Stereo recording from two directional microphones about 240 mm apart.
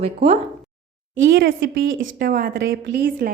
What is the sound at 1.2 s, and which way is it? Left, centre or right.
A woman's voice, right.